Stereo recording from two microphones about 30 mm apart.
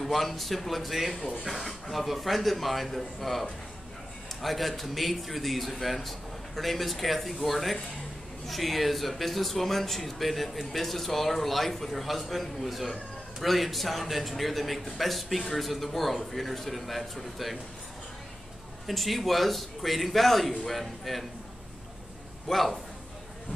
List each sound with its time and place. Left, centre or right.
0.0 s speech: centre
1.1 s speech: right
1.4 s speech: centre
18.9 s speech: centre
22.5 s speech: centre